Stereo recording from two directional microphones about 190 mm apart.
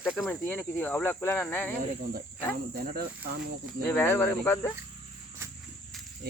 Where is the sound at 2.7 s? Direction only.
50° right (ahead or behind).